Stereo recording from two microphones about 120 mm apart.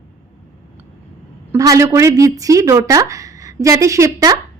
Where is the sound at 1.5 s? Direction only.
30° right (ahead or behind).